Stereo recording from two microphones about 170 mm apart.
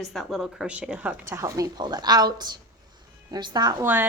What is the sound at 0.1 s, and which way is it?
A woman's voice, centre (ahead or behind).